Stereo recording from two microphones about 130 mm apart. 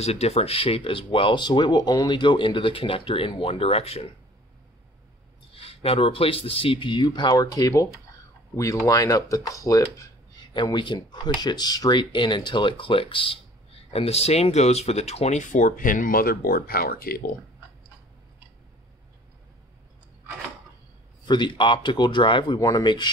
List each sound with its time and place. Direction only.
0.0 s speech: 55° left (ahead or behind)
5.5 s speech: 45° left (ahead or behind); by 16.9 s 90° left
21.3 s speech: 35° left (ahead or behind)